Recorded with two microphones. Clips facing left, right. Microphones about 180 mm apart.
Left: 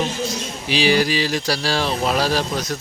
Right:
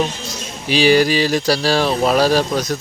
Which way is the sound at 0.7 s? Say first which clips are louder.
Right 5 dB; 45° right (ahead or behind).